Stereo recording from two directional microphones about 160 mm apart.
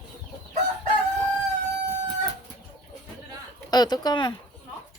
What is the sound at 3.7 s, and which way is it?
Speech, 25° left (ahead or behind).